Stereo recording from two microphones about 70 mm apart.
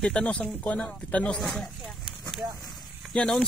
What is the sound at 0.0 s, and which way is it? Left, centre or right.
Speech, centre.